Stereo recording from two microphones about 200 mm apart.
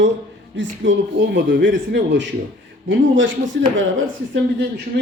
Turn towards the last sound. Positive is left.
turn(degrees=-55)  # may be behind; listen again after turning